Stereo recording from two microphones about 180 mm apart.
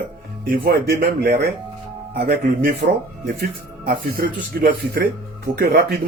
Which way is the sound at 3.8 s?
55° right (ahead or behind).